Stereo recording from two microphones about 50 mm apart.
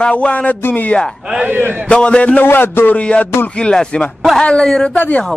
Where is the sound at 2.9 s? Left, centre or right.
Left.